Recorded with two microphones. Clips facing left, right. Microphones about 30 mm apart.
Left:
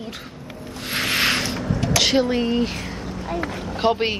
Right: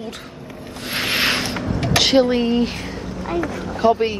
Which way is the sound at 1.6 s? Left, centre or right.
Right.